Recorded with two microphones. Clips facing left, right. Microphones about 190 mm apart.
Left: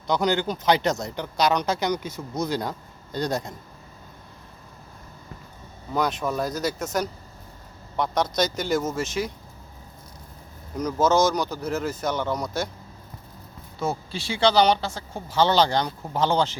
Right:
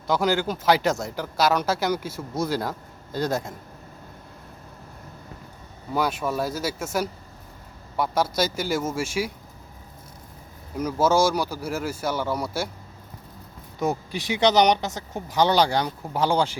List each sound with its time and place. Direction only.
0.1 s speech: 5° right (ahead or behind)
5.9 s speech: 5° right (ahead or behind)
10.8 s speech: 10° right (ahead or behind)
13.7 s speech: 15° right (ahead or behind)